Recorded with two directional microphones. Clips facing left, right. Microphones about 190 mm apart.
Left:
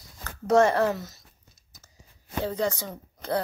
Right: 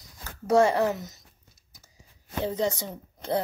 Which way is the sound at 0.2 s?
10° right (ahead or behind).